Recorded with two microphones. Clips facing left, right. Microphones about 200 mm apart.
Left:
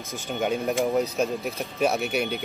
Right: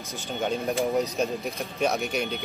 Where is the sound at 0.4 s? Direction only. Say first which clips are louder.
Left 2 dB; 5° left (ahead or behind).